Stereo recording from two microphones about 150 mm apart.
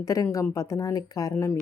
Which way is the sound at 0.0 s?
20° left (ahead or behind).